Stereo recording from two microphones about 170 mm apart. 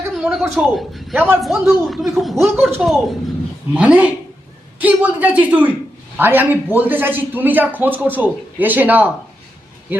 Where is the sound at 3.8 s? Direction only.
5° right (ahead or behind).